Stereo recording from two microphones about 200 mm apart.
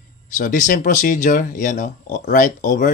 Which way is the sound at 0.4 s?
40° left (ahead or behind).